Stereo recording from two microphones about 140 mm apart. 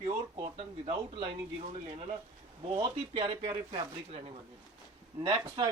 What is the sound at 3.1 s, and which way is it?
Speech, 35° right (ahead or behind).